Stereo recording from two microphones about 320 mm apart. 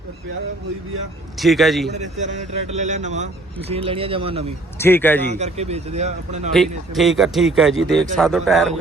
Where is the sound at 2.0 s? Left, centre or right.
Right.